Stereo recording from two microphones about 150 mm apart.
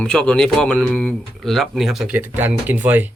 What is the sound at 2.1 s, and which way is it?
Speech, 15° right (ahead or behind).